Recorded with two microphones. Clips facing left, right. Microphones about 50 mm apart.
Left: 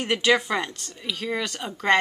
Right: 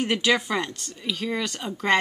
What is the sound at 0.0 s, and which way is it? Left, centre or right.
Speech, centre.